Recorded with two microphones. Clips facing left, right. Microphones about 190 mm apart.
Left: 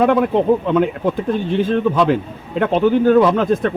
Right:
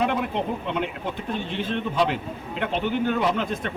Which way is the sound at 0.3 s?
45° left (ahead or behind).